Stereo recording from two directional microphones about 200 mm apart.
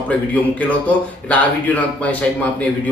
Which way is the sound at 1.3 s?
5° left (ahead or behind).